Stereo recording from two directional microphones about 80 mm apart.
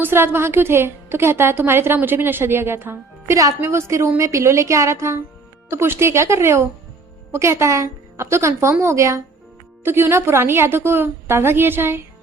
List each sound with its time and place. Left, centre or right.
0.0 s a woman's voice: right